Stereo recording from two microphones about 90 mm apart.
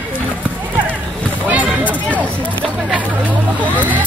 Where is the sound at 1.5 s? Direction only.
15° right (ahead or behind).